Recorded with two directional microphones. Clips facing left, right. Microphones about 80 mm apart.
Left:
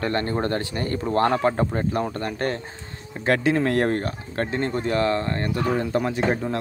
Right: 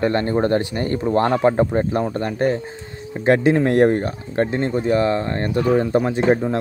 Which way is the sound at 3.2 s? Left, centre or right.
Right.